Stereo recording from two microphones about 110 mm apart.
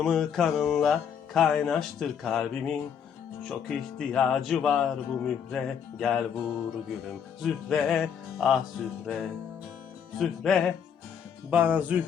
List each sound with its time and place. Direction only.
0.0 s speech: centre (ahead or behind)
11.5 s speech: 15° right (ahead or behind)